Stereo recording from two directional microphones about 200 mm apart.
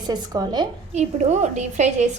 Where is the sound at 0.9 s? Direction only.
35° right (ahead or behind).